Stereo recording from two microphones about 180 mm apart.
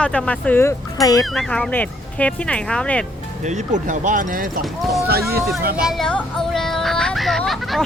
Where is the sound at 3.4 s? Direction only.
45° right (ahead or behind).